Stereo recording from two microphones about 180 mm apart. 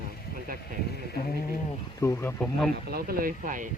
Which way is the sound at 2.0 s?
15° left (ahead or behind).